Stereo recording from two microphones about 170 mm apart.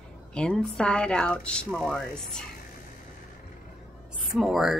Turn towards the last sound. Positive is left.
turn(degrees=0)  # may be behind; listen again after turning